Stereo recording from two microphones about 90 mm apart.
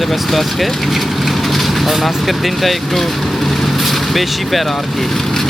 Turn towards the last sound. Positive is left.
turn(degrees=5)  # may be behind; listen again after turning